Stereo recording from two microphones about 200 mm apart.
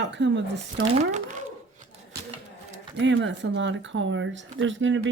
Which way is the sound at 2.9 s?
65° right (ahead or behind).